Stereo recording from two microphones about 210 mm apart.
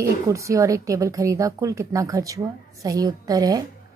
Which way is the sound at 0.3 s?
15° right (ahead or behind).